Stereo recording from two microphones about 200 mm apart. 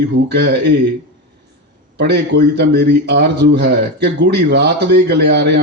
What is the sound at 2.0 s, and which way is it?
A man's voice, 55° right (ahead or behind).